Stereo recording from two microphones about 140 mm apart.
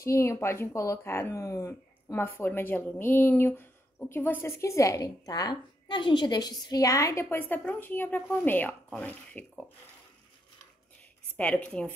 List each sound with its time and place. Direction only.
0.0 s speech: 20° left (ahead or behind)
11.3 s speech: 10° left (ahead or behind)